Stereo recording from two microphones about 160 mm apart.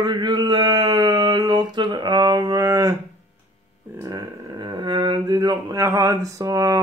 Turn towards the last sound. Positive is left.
turn(degrees=-20)  # may be behind; listen again after turning